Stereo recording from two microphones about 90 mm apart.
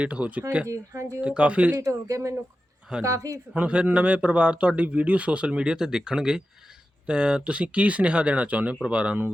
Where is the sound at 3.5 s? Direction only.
15° right (ahead or behind).